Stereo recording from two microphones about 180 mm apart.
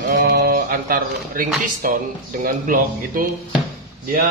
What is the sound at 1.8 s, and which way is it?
A man's voice, 50° right (ahead or behind).